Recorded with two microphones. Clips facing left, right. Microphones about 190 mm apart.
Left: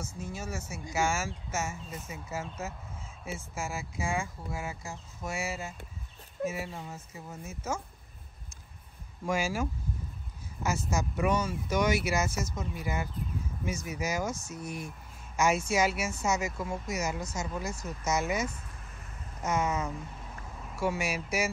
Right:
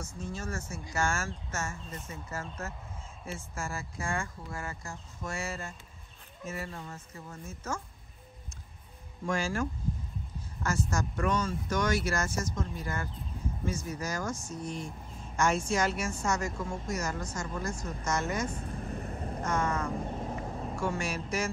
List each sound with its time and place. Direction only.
0.0 s speech: 5° left (ahead or behind)
9.2 s speech: 5° left (ahead or behind)
18.5 s vehicle: 35° right (ahead or behind)
19.4 s speech: 5° left (ahead or behind)
20.0 s vehicle: 45° right (ahead or behind)
20.8 s speech: 5° left (ahead or behind)